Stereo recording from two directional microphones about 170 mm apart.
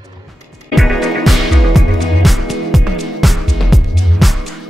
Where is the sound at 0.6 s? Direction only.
Centre (ahead or behind).